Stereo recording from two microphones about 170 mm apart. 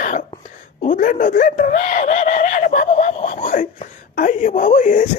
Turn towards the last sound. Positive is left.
turn(degrees=50)  # may be behind; listen again after turning